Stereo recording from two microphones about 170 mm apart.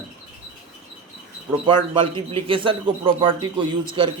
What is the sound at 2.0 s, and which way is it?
A man's voice, 30° right (ahead or behind).